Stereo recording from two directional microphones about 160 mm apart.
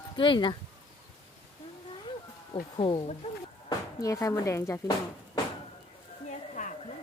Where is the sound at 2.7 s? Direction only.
30° left (ahead or behind).